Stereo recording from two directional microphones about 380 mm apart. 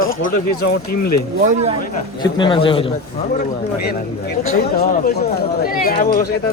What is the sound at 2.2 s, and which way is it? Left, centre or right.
Speech, centre.